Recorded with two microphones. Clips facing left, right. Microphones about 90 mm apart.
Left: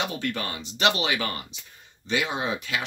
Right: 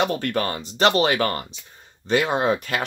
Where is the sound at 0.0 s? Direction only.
50° right (ahead or behind).